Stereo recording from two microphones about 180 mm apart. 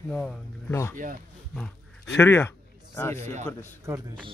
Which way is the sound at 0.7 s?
15° left (ahead or behind).